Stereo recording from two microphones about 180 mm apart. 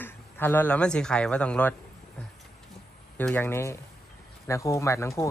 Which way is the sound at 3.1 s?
10° left (ahead or behind).